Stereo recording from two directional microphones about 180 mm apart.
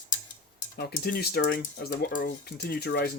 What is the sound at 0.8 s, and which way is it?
Speech, 65° left (ahead or behind).